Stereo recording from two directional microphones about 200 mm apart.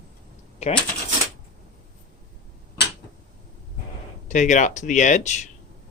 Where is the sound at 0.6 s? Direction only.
30° left (ahead or behind).